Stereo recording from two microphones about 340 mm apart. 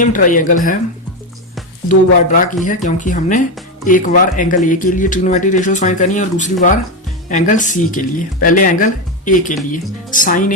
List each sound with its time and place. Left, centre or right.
0.0 s speech: left
1.9 s speech: left